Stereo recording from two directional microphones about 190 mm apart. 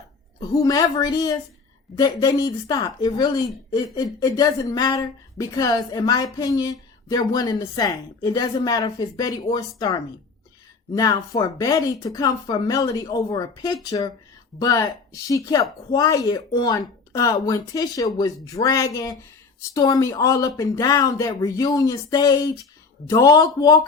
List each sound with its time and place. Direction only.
0.5 s a woman's voice: 20° left (ahead or behind)